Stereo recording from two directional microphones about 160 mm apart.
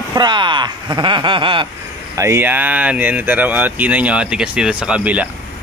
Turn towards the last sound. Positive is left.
turn(degrees=-10)  # may be behind; listen again after turning